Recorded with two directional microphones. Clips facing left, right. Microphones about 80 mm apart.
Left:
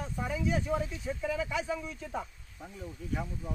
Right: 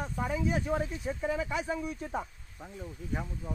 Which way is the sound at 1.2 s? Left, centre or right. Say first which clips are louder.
Even; right.